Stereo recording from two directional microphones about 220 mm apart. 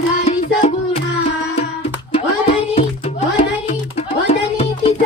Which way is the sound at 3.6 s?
30° left (ahead or behind).